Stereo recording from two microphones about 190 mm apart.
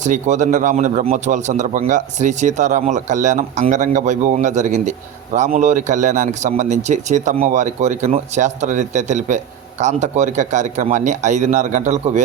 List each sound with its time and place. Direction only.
0.0 s speech: 40° right (ahead or behind)